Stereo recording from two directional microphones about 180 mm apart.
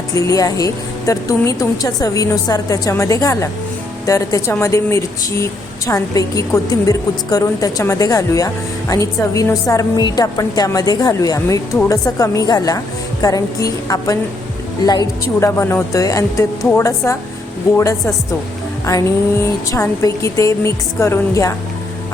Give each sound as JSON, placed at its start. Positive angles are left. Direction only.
{"t": 0.1, "sound": "a woman's voice", "side_deg": 15}